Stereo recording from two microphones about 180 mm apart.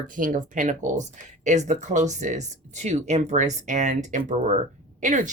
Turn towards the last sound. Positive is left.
turn(degrees=-45)  # may be behind; listen again after turning